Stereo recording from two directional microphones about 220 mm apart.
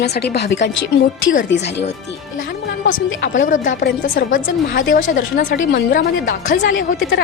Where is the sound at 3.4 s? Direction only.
35° left (ahead or behind).